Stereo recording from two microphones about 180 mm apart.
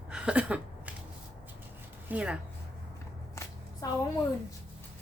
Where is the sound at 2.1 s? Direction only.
5° right (ahead or behind).